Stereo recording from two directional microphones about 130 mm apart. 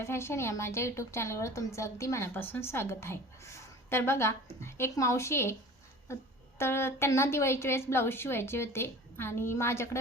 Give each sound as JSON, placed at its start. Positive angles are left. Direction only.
{"t": 0.0, "sound": "a woman's voice", "side_deg": 20}
{"t": 6.6, "sound": "a woman's voice", "side_deg": 20}